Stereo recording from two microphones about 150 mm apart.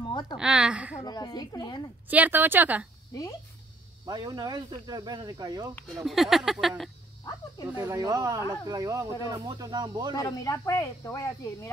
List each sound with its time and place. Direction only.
0.0 s a sound: 30° left (ahead or behind)
0.4 s a woman's voice: 5° right (ahead or behind)
1.0 s speech: 25° left (ahead or behind)
2.0 s a woman's voice: 10° right (ahead or behind)
4.0 s speech: 25° right (ahead or behind)
6.0 s a woman's voice: centre (ahead or behind)
7.7 s a woman's voice: 10° right (ahead or behind)
8.0 s speech: 25° right (ahead or behind)
10.1 s speech: 25° left (ahead or behind)